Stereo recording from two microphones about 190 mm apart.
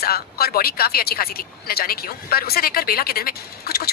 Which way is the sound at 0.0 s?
55° left (ahead or behind).